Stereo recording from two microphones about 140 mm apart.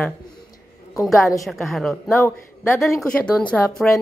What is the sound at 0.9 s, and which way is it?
Speech, centre (ahead or behind).